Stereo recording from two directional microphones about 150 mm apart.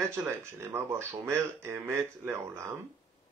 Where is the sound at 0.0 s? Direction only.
15° right (ahead or behind).